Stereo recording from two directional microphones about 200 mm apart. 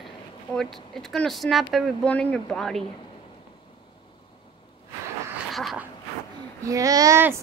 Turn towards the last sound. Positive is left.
turn(degrees=-10)  # may be behind; listen again after turning